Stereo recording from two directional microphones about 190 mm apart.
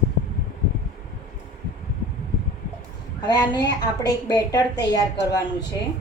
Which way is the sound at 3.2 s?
20° left (ahead or behind).